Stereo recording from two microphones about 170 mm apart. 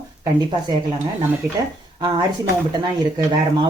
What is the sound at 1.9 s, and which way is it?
Speech, 25° right (ahead or behind).